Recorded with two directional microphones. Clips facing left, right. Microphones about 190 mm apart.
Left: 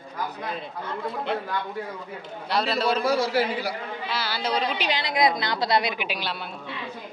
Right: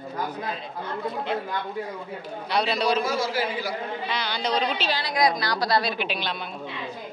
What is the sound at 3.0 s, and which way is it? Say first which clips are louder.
Speech: left 3 dB; 65° left (ahead or behind).